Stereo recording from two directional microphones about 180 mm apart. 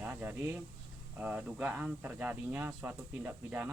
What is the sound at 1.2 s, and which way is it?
Speech, 10° right (ahead or behind).